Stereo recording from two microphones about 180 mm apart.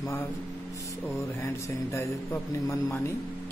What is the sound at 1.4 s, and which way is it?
Speech, 15° left (ahead or behind).